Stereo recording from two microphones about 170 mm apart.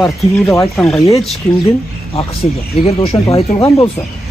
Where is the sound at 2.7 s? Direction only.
35° left (ahead or behind).